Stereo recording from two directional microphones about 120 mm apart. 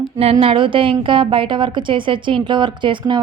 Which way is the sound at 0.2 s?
55° right (ahead or behind).